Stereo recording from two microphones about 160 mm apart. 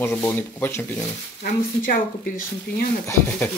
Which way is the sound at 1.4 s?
60° left (ahead or behind).